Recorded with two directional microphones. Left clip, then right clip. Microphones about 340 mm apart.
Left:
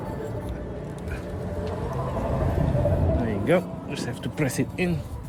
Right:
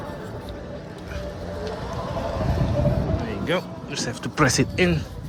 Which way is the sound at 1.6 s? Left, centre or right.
Right.